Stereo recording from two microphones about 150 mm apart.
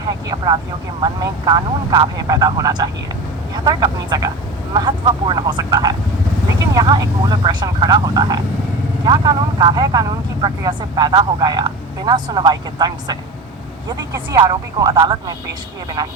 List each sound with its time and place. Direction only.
0.0 s vehicle: 25° right (ahead or behind)
1.0 s speech: 25° right (ahead or behind)